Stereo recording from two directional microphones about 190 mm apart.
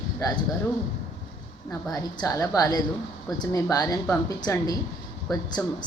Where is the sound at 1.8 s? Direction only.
20° left (ahead or behind).